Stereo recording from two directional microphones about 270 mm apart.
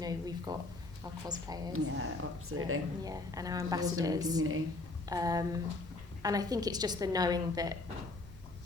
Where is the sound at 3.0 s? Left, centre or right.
Centre.